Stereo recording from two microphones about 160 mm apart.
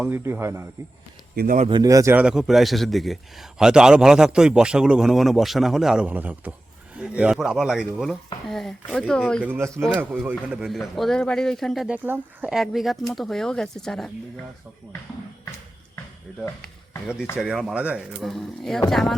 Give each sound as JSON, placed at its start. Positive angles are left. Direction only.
{"t": 0.0, "sound": "speech", "side_deg": -15}
{"t": 1.4, "sound": "speech", "side_deg": -75}
{"t": 1.7, "sound": "a man's voice", "side_deg": -20}
{"t": 2.1, "sound": "a man's voice", "side_deg": -5}
{"t": 9.4, "sound": "a man's voice", "side_deg": -15}
{"t": 12.0, "sound": "a man's voice", "side_deg": -10}
{"t": 17.3, "sound": "a man's voice", "side_deg": -5}